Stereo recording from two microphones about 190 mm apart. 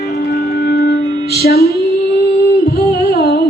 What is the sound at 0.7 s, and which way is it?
Music, 55° left (ahead or behind).